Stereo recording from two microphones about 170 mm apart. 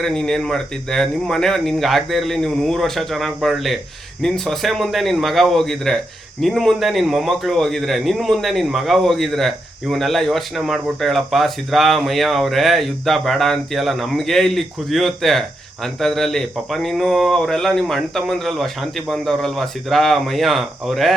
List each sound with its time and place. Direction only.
0.0 s a man's voice: 5° left (ahead or behind)